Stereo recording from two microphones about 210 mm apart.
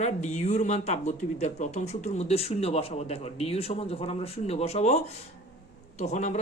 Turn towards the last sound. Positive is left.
turn(degrees=35)  # may be behind; listen again after turning